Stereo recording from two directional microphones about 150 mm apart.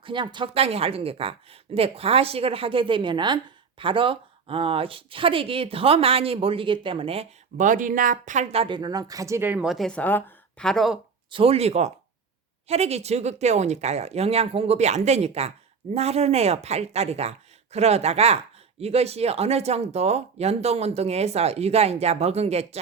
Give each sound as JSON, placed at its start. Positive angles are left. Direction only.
{"t": 0.0, "sound": "a woman's voice", "side_deg": -30}
{"t": 7.6, "sound": "speech", "side_deg": -60}
{"t": 8.6, "sound": "a woman's voice", "side_deg": -30}
{"t": 11.3, "sound": "speech", "side_deg": -40}